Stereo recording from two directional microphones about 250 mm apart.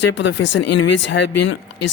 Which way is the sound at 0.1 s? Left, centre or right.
Left.